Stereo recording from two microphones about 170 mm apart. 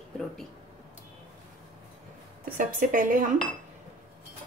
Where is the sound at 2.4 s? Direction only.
55° right (ahead or behind).